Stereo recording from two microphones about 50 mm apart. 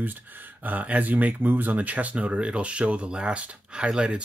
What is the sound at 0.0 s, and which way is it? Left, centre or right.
Speech, right.